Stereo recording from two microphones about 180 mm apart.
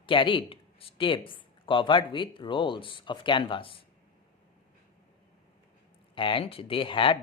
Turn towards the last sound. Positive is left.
turn(degrees=30)  # may be behind; listen again after turning